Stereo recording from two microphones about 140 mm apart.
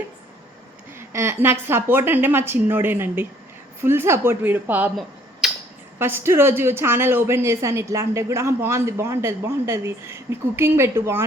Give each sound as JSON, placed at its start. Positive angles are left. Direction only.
{"t": 0.9, "sound": "a woman's voice", "side_deg": -20}
{"t": 5.4, "sound": "a sound", "side_deg": 0}
{"t": 6.0, "sound": "a woman's voice", "side_deg": -15}